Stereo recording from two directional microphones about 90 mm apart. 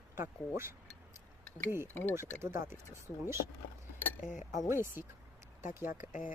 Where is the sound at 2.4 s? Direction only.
30° right (ahead or behind).